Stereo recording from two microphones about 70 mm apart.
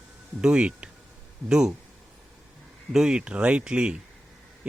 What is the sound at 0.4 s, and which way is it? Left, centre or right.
Speech, centre.